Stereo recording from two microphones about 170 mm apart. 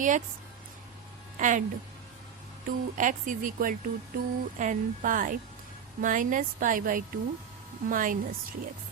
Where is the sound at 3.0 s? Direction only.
50° right (ahead or behind).